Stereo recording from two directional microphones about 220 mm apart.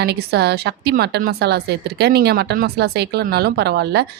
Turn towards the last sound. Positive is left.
turn(degrees=-50)  # may be behind; listen again after turning